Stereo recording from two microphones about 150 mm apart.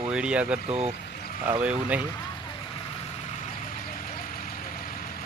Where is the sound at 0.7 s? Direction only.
45° right (ahead or behind).